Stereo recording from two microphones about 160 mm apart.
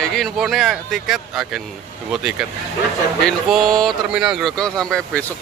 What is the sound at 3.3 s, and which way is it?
Speech, centre (ahead or behind).